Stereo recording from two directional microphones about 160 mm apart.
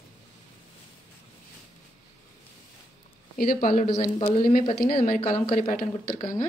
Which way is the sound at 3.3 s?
65° left (ahead or behind).